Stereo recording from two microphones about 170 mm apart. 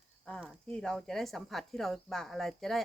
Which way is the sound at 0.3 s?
5° left (ahead or behind).